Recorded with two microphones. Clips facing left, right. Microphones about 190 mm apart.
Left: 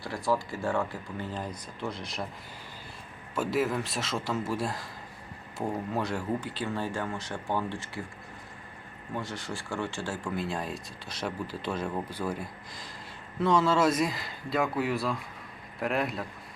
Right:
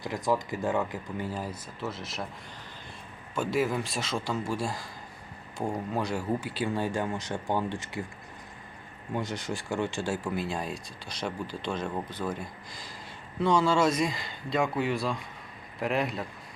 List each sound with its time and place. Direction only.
0.0 s speech: 20° right (ahead or behind)
0.8 s speech: 5° right (ahead or behind)
3.3 s speech: 5° left (ahead or behind); by 8.0 s 15° right (ahead or behind)
9.1 s speech: 20° right (ahead or behind)
10.3 s speech: centre (ahead or behind)